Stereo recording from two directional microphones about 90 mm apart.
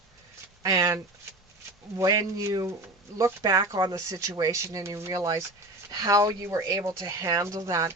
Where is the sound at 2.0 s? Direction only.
40° right (ahead or behind).